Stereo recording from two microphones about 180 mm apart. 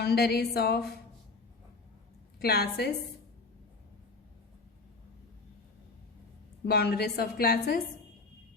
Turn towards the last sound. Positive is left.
turn(degrees=60)  # may be behind; listen again after turning